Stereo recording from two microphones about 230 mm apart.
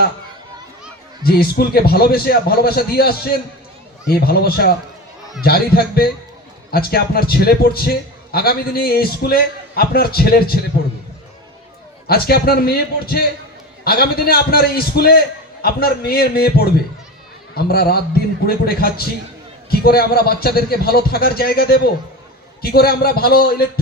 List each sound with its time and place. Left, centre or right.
1.2 s a man's voice: left
12.0 s a man's voice: left